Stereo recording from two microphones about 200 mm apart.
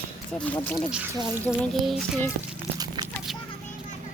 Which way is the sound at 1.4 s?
5° left (ahead or behind).